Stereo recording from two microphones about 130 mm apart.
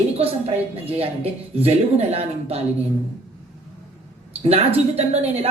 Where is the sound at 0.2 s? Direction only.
50° right (ahead or behind).